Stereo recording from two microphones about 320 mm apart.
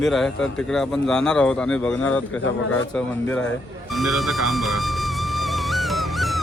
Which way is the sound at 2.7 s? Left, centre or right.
Centre.